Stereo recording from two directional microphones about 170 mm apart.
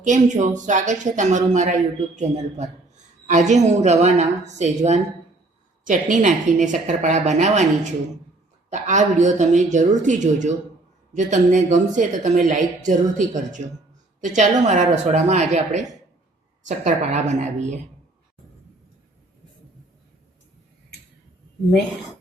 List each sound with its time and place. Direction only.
0.0 s a man's voice: 45° right (ahead or behind)
14.2 s a man's voice: 45° right (ahead or behind)